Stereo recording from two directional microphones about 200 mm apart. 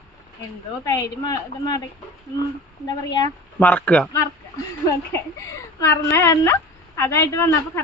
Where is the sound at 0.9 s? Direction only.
20° left (ahead or behind).